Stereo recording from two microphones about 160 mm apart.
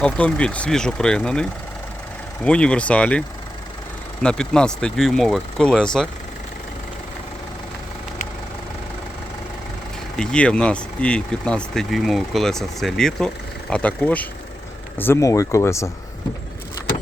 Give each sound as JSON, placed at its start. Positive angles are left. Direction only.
{"t": 0.0, "sound": "speech", "side_deg": 5}
{"t": 10.2, "sound": "speech", "side_deg": 5}